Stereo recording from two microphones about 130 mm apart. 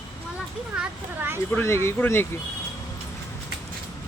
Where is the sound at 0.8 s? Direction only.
15° right (ahead or behind).